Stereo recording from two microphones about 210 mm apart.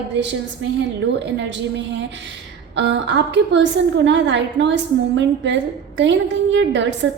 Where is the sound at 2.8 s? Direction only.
55° right (ahead or behind).